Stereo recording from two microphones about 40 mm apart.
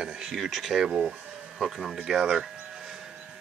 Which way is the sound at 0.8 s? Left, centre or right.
Centre.